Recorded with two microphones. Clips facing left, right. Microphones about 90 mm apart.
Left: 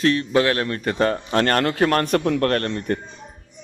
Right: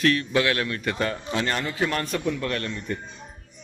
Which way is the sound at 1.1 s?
55° left (ahead or behind).